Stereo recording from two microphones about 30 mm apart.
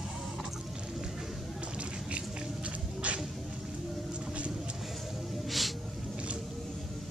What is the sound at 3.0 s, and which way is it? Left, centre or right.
Music, right.